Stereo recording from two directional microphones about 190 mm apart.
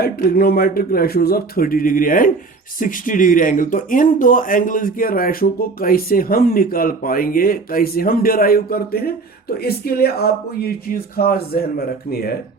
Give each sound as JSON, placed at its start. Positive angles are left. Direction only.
{"t": 0.0, "sound": "speech", "side_deg": 55}